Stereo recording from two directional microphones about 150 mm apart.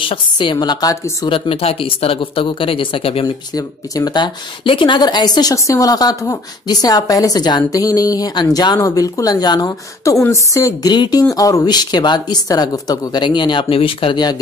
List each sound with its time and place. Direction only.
0.0 s speech: 35° left (ahead or behind)
1.3 s speech: 40° left (ahead or behind)
3.5 s speech: 25° left (ahead or behind)